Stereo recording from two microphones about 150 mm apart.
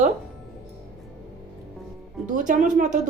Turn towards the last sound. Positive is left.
turn(degrees=-60)  # may be behind; listen again after turning